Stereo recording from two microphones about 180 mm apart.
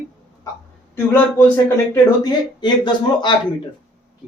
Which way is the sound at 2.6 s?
25° left (ahead or behind).